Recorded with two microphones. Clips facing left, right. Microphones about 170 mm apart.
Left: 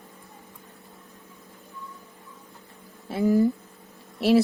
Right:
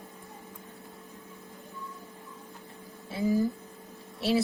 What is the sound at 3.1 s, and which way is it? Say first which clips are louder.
Speech: left 6 dB; 60° left (ahead or behind).